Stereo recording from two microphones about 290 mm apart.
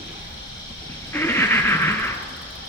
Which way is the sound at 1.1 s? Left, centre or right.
Centre.